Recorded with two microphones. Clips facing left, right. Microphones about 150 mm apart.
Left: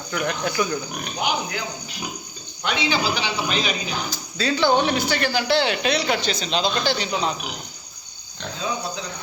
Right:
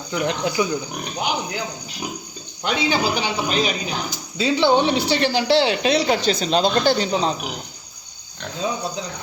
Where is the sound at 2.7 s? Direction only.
45° right (ahead or behind).